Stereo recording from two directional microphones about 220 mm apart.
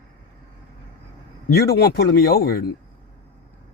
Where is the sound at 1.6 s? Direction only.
45° left (ahead or behind).